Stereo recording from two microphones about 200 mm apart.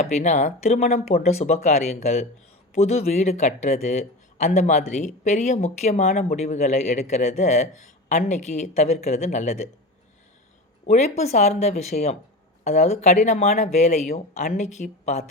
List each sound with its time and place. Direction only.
0.0 s speech: 35° left (ahead or behind)
10.8 s speech: 35° left (ahead or behind)